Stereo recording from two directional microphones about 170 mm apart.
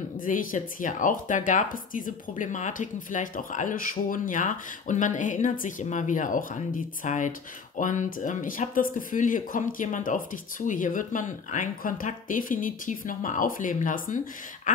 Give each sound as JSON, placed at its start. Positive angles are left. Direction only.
{"t": 0.2, "sound": "speech", "side_deg": 50}